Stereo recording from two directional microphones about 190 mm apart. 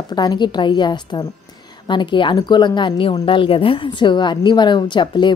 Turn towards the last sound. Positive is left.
turn(degrees=25)  # may be behind; listen again after turning